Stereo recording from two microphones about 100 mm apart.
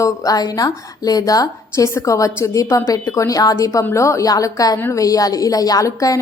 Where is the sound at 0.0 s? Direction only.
35° left (ahead or behind).